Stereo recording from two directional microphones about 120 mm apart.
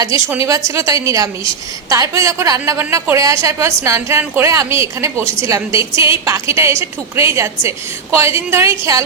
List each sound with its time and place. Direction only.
0.4 s a woman's voice: 25° right (ahead or behind)